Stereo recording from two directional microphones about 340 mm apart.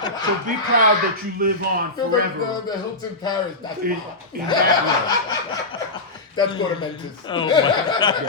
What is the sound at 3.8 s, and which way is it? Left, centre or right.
Speech, right.